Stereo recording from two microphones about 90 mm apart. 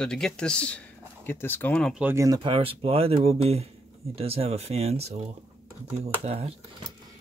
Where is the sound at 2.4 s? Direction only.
80° right.